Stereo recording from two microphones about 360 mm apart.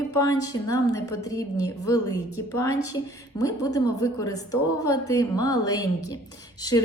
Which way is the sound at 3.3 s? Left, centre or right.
Centre.